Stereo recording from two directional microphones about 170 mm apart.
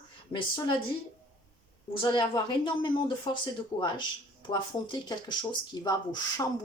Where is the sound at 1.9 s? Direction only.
25° left (ahead or behind).